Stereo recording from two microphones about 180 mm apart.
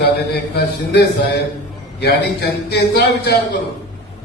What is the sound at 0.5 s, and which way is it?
A man's voice, 65° left (ahead or behind).